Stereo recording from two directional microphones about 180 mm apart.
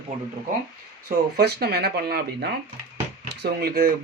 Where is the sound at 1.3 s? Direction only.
60° right (ahead or behind).